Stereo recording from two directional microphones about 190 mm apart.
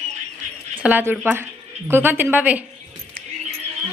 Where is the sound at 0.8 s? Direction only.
10° right (ahead or behind).